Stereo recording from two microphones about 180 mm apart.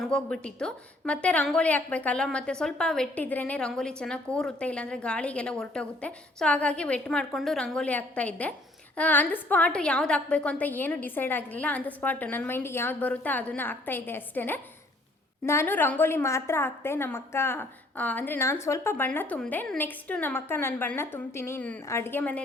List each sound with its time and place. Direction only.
0.0 s a woman's voice: 5° left (ahead or behind)